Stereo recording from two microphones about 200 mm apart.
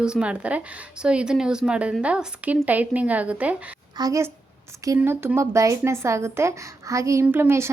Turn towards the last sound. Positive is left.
turn(degrees=-10)  # may be behind; listen again after turning